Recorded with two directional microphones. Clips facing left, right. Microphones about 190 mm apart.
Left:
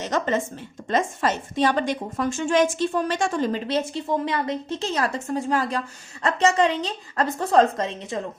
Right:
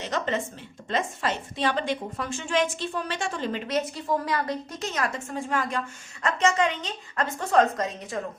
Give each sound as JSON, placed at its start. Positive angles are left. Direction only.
{"t": 0.0, "sound": "a woman's voice", "side_deg": 45}